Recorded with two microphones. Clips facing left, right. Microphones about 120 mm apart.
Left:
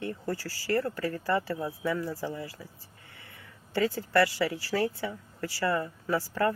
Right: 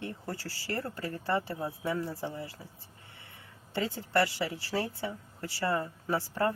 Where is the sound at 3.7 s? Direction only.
20° right (ahead or behind).